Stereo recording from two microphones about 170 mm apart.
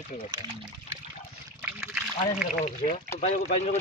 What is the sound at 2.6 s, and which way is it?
Speech, 40° left (ahead or behind).